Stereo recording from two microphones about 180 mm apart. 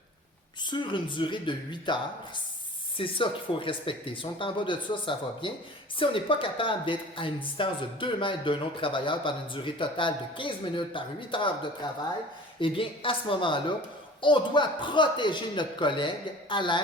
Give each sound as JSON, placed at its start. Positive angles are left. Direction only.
{"t": 0.6, "sound": "speech", "side_deg": 25}